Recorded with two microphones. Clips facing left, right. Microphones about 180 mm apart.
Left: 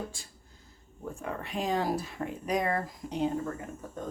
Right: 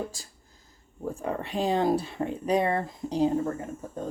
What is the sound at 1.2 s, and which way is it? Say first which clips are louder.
Speech: right 5 dB; 30° right (ahead or behind).